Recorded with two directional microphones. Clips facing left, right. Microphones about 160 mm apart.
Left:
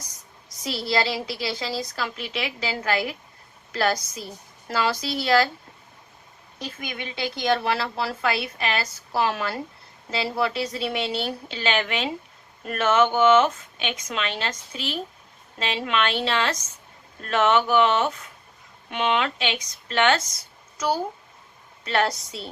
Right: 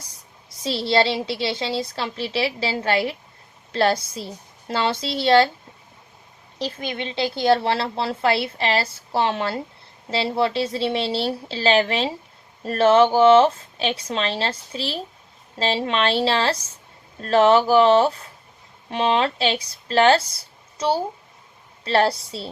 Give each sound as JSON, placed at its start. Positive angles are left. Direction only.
{"t": 0.5, "sound": "a woman's voice", "side_deg": -25}
{"t": 6.7, "sound": "a woman's voice", "side_deg": -25}